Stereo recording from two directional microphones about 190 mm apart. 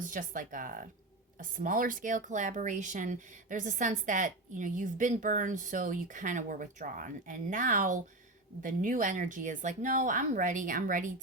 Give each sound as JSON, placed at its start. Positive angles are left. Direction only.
{"t": 0.0, "sound": "speech", "side_deg": -45}